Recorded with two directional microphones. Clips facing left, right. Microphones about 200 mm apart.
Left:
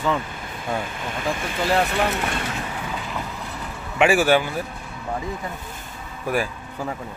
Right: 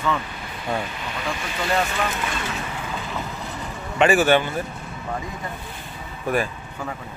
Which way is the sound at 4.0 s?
10° left (ahead or behind).